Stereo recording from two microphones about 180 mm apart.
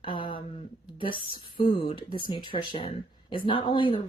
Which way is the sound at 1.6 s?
30° left (ahead or behind).